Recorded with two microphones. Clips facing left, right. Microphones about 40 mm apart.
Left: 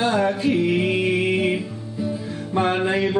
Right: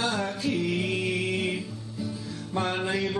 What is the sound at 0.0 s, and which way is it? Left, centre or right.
Music, left.